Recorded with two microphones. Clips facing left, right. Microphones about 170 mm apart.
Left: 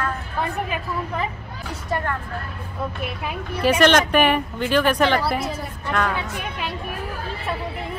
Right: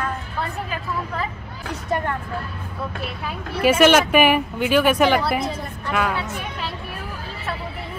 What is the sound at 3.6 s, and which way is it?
A woman's voice, 5° right (ahead or behind).